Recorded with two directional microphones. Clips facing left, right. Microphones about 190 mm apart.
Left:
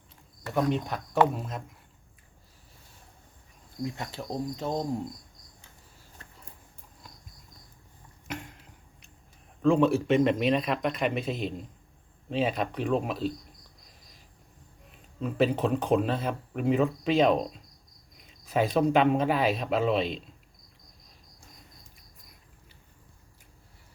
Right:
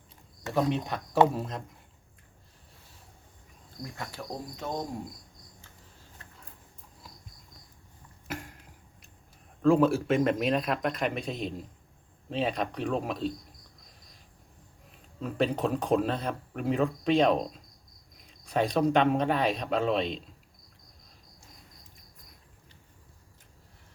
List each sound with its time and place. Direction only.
0.5 s speech: centre (ahead or behind)
3.9 s cricket: 25° left (ahead or behind)
9.6 s speech: centre (ahead or behind)
15.2 s speech: centre (ahead or behind)